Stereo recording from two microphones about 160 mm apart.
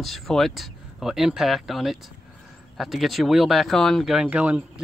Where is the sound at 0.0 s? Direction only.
Centre (ahead or behind).